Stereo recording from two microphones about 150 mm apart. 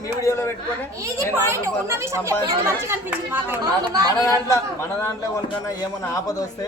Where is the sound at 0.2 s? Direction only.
20° left (ahead or behind).